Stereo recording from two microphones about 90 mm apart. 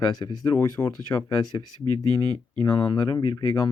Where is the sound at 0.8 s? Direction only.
25° left (ahead or behind).